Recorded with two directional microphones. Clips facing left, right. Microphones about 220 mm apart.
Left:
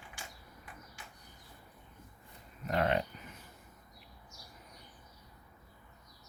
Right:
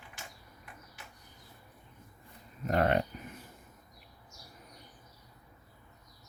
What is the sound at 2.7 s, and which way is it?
Speech, 50° right (ahead or behind).